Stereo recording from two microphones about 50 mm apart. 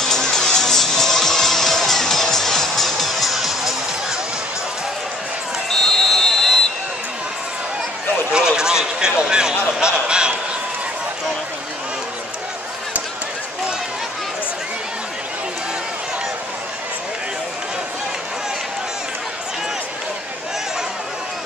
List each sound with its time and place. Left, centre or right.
0.0 s music: centre
5.7 s basketball bounce: centre
8.3 s a sound: centre